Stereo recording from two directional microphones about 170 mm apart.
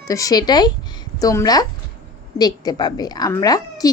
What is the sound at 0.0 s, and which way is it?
A woman's voice, 20° left (ahead or behind).